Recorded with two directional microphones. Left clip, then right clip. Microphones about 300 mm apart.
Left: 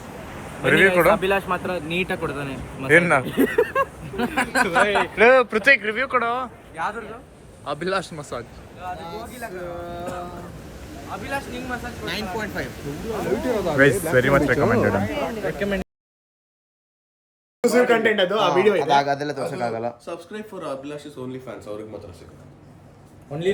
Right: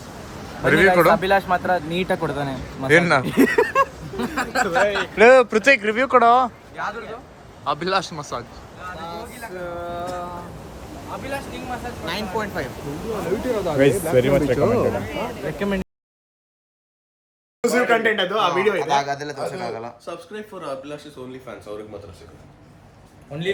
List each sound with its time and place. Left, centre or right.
0.7 s speech: centre
1.5 s speech: right
2.4 s speech: centre
3.2 s speech: right
4.6 s speech: left
5.1 s speech: centre
7.6 s speech: centre
17.6 s speech: centre
19.0 s speech: centre
20.1 s speech: centre
23.3 s speech: centre